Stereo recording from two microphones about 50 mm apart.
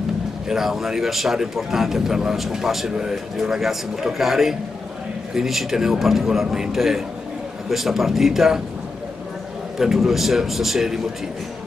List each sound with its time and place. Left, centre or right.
0.5 s a man's voice: centre
9.8 s a man's voice: centre